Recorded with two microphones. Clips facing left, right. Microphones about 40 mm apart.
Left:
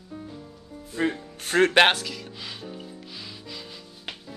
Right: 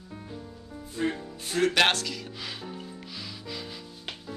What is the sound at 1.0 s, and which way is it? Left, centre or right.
Music, left.